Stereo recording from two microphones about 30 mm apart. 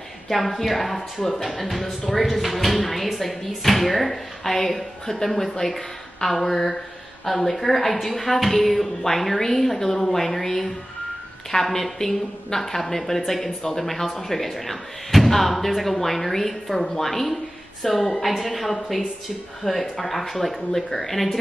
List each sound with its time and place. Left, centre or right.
0.3 s speech: centre